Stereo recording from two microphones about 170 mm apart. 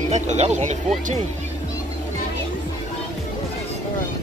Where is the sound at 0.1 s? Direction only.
45° right (ahead or behind).